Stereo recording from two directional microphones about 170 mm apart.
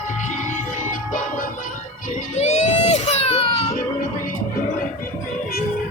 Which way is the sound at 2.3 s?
40° left (ahead or behind).